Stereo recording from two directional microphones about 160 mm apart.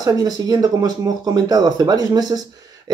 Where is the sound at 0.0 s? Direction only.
25° right (ahead or behind).